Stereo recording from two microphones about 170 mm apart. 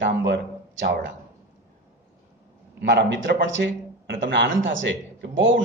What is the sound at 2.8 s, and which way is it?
A man's voice, 90° right.